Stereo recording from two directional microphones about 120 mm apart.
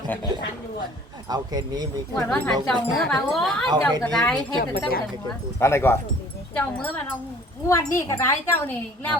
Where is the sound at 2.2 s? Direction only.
10° left (ahead or behind).